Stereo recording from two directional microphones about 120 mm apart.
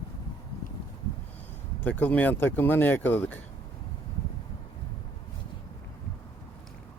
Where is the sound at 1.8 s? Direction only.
15° left (ahead or behind).